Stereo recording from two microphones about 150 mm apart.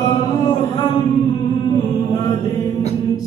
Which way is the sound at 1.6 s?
20° left (ahead or behind).